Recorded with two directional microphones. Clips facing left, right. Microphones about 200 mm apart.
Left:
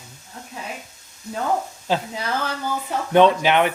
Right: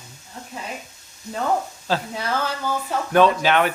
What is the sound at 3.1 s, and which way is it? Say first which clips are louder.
Speech: left 2 dB; 20° left (ahead or behind).